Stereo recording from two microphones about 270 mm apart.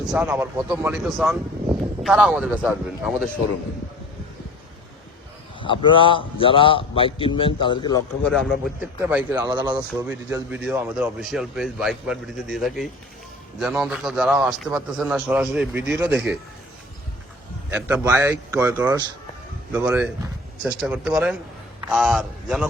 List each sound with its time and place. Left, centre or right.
0.1 s speech: centre
5.5 s a man's voice: centre
8.3 s speech: centre
17.7 s a man's voice: centre